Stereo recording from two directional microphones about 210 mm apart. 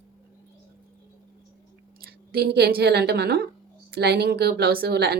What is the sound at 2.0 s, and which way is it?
A woman's voice, 50° right (ahead or behind).